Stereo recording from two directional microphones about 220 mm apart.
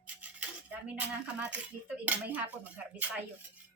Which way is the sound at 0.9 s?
5° right (ahead or behind).